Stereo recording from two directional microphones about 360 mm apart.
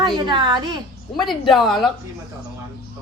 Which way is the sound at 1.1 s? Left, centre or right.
Centre.